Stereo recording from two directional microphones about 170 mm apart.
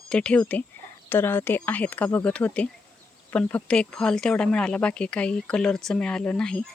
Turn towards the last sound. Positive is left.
turn(degrees=5)  # may be behind; listen again after turning